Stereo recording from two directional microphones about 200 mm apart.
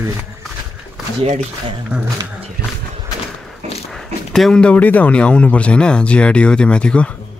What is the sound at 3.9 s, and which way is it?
Speech, centre (ahead or behind).